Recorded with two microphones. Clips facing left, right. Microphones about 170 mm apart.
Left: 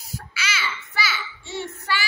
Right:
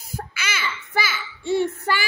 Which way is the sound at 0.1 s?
50° right (ahead or behind).